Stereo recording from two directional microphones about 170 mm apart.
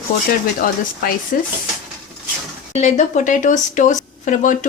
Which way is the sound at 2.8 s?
45° left (ahead or behind).